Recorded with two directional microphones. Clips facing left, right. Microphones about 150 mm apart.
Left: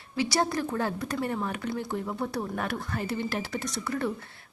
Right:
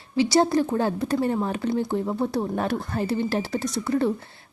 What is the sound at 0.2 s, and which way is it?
A woman's voice, 25° right (ahead or behind).